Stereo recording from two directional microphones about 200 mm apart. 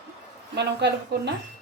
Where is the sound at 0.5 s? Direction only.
60° right (ahead or behind).